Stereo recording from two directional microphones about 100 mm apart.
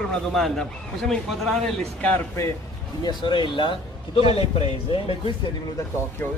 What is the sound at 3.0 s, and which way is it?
Speech, 50° left (ahead or behind).